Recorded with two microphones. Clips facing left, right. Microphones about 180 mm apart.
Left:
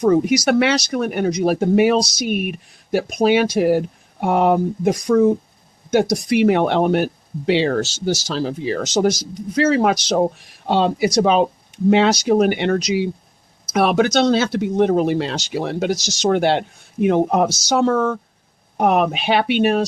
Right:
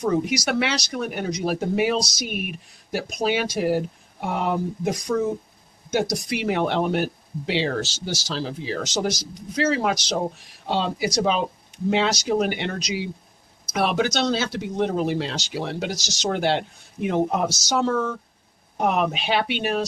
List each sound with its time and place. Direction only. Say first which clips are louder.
0.0 s speech: left 7 dB; 50° left (ahead or behind)